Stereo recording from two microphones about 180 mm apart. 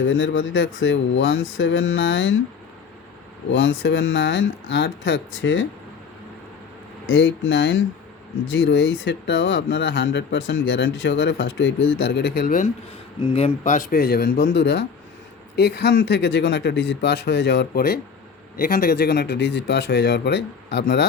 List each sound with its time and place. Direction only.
0.0 s speech: 90° left
3.5 s speech: 90° left
7.1 s speech: 90° left; by 12.7 s 50° left (ahead or behind)
13.1 s speech: 30° left (ahead or behind)
13.7 s speech: 50° left (ahead or behind); by 14.8 s 75° left (ahead or behind)
15.5 s speech: 65° left (ahead or behind)